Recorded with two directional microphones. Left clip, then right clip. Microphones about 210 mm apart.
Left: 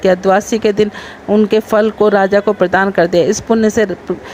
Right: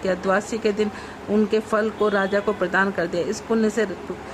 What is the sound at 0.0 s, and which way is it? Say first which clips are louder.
Speech: left 11 dB; 30° left (ahead or behind).